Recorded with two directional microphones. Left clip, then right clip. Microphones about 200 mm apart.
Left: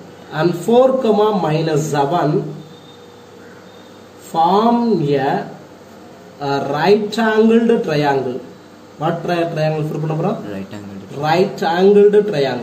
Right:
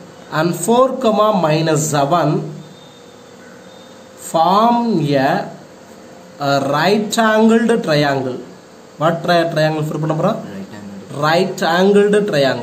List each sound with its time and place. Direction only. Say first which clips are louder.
0.3 s a man's voice: even; 55° right (ahead or behind)
4.3 s a man's voice: right 1 dB; 55° right (ahead or behind)
6.4 s speech: right 2 dB; 55° right (ahead or behind)
11.1 s speech: right 1 dB; 50° right (ahead or behind)